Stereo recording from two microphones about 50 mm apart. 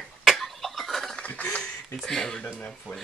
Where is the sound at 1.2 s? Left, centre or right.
Left.